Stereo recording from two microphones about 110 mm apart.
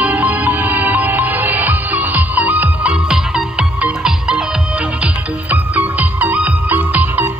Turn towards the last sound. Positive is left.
turn(degrees=-15)  # may be behind; listen again after turning